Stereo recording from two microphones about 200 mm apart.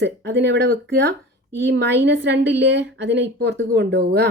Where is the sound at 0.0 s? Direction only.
60° right (ahead or behind).